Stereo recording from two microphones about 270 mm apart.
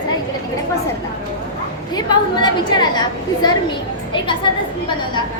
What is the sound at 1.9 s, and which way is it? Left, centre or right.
A woman's voice, centre.